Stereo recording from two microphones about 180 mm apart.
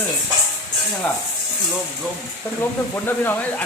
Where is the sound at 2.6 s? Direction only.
10° left (ahead or behind).